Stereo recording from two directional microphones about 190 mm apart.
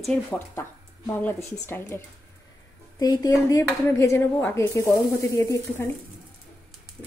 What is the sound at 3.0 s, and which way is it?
Speech, 20° left (ahead or behind).